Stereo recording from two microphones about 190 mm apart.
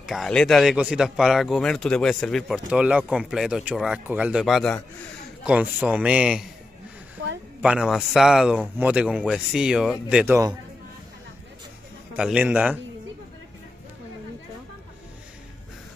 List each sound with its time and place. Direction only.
0.0 s a man's voice: centre (ahead or behind)
7.6 s speech: 5° right (ahead or behind)
12.2 s a man's voice: 5° right (ahead or behind)